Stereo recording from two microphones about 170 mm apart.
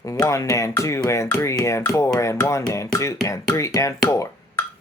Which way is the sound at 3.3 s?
20° left (ahead or behind).